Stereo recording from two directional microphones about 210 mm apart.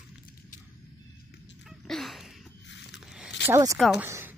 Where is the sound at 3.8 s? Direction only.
Centre (ahead or behind).